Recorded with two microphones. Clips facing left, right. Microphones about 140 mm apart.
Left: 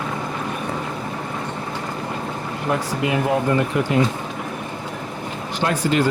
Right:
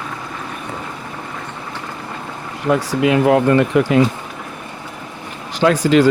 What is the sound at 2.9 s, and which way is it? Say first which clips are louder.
Speech: right 8 dB; 90° right.